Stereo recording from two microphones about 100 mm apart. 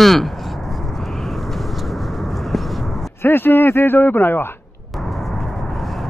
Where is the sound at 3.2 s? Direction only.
20° left (ahead or behind).